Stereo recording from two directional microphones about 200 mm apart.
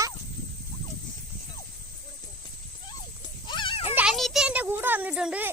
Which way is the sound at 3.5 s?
25° left (ahead or behind).